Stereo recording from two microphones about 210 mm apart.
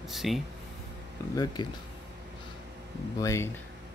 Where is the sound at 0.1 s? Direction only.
Centre (ahead or behind).